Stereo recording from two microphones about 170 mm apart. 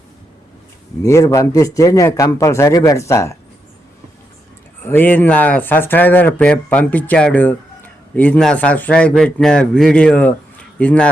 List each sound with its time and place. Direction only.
1.0 s speech: 15° left (ahead or behind)
4.8 s a man's voice: 10° left (ahead or behind)